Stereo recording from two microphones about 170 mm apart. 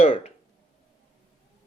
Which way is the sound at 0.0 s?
35° left (ahead or behind).